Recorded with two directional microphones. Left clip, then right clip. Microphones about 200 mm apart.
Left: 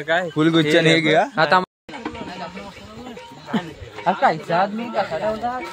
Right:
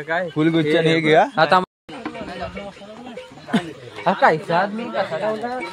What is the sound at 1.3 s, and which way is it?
Speech, 5° right (ahead or behind).